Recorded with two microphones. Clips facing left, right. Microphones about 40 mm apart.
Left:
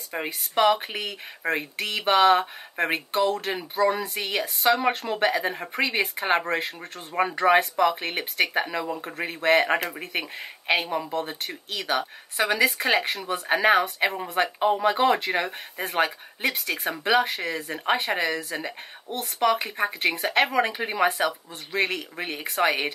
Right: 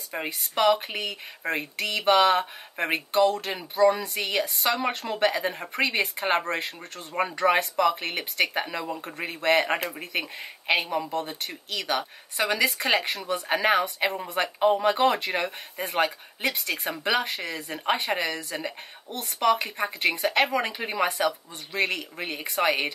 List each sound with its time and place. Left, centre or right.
0.1 s speech: centre